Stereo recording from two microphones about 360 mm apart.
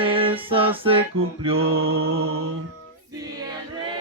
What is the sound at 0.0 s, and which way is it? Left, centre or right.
Music, centre.